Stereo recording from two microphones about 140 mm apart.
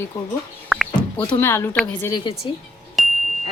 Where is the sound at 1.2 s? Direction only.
15° left (ahead or behind).